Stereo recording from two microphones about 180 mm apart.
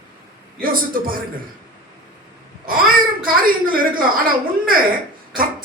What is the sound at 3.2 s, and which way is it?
Speech, 50° right (ahead or behind).